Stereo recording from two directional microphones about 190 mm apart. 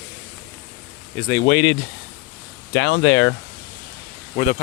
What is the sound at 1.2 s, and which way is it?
Speech, 70° left (ahead or behind).